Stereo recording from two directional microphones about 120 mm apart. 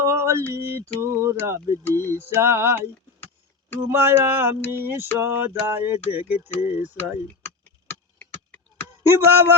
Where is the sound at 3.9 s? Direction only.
20° right (ahead or behind).